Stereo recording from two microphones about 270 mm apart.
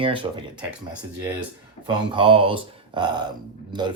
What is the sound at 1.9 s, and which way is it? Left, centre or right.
Speech, centre.